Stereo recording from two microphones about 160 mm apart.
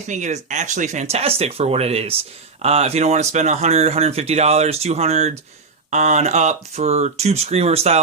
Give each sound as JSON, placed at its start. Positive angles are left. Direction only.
{"t": 0.1, "sound": "speech", "side_deg": -50}